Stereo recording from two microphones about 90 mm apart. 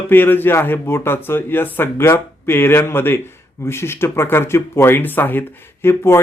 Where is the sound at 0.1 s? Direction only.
20° left (ahead or behind).